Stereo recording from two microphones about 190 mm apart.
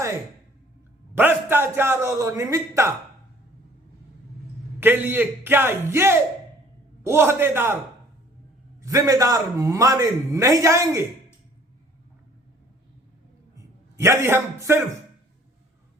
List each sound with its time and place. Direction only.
1.1 s a man's voice: 10° right (ahead or behind)
4.8 s a man's voice: 10° right (ahead or behind)
8.8 s a man's voice: 15° right (ahead or behind)
14.0 s a man's voice: 15° right (ahead or behind)